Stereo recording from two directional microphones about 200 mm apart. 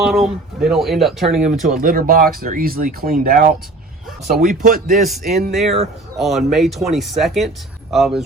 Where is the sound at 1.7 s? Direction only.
45° right (ahead or behind).